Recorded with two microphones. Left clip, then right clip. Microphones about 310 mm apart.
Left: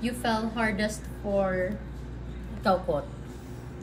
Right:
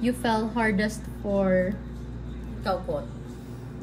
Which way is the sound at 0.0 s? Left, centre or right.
Right.